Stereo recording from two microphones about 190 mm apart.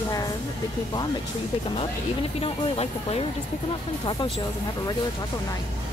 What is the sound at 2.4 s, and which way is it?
Speech, 30° left (ahead or behind).